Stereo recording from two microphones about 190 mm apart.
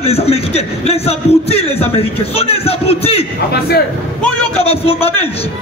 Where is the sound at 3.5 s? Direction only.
55° left (ahead or behind).